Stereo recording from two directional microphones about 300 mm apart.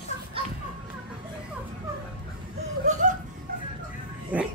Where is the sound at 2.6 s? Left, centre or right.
Right.